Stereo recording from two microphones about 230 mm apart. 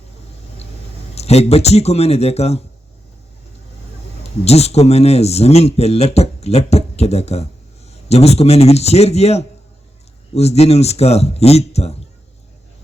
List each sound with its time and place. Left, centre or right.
1.1 s speech: left
4.2 s speech: left